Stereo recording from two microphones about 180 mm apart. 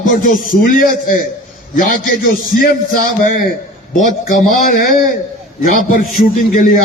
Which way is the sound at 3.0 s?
50° left (ahead or behind).